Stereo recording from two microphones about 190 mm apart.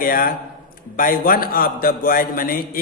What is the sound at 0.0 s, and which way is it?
A man's voice, 50° left (ahead or behind).